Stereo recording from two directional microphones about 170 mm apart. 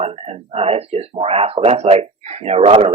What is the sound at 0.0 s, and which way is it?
Speech, 35° right (ahead or behind).